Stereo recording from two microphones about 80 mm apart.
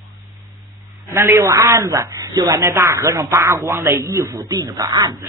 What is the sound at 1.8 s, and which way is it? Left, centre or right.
Speech, right.